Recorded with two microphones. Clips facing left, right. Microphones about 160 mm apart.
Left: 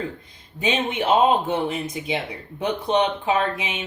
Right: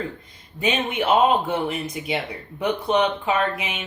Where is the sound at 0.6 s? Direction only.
25° left (ahead or behind).